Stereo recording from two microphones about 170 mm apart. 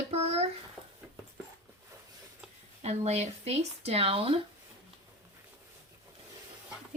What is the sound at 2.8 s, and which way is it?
Speech, 40° right (ahead or behind).